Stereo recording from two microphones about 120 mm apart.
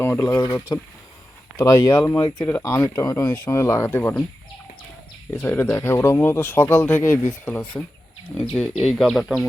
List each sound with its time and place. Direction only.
0.0 s speech: 20° left (ahead or behind)
1.5 s speech: 25° left (ahead or behind)
2.0 s speech: 15° left (ahead or behind)
5.3 s speech: 15° left (ahead or behind); by 9.5 s centre (ahead or behind)